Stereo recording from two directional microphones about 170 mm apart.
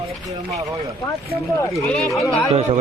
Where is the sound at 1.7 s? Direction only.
Centre (ahead or behind).